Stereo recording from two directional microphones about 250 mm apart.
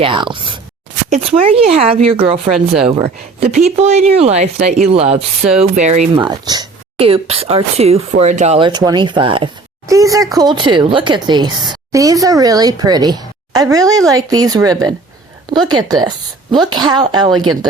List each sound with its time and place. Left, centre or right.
0.0 s speech: centre
3.8 s speech: right
6.1 s a woman's voice: centre